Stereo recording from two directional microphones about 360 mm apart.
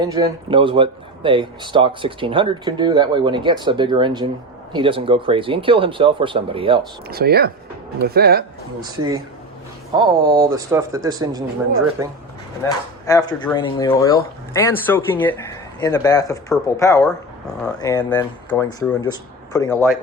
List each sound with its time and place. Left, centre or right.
0.0 s speech: centre
7.1 s speech: right
8.8 s speech: centre
13.1 s speech: centre